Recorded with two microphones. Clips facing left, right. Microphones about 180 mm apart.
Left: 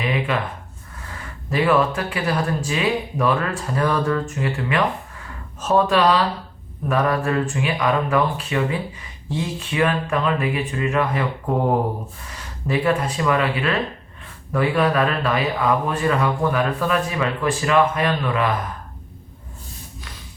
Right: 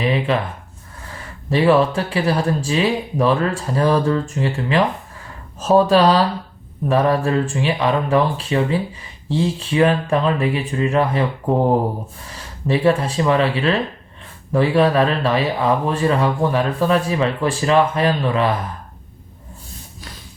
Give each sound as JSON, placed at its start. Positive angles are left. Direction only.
{"t": 0.0, "sound": "a sound", "side_deg": -30}
{"t": 1.5, "sound": "speech", "side_deg": -30}
{"t": 12.6, "sound": "speech", "side_deg": -30}